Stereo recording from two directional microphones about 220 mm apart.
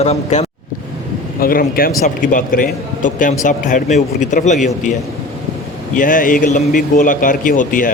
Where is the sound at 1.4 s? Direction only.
40° left (ahead or behind).